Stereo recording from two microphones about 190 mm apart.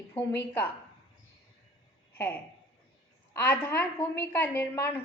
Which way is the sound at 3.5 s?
10° left (ahead or behind).